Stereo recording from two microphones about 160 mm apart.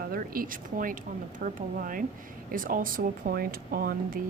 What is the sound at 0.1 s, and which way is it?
Speech, 60° right (ahead or behind).